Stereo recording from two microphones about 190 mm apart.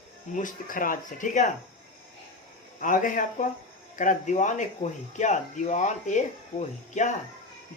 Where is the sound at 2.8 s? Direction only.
45° left (ahead or behind).